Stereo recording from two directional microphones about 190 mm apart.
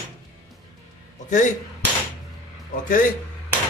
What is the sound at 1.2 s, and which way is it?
Speech, 40° left (ahead or behind).